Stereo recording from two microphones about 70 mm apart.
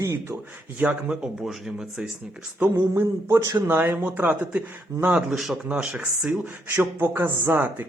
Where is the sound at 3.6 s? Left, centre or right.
Right.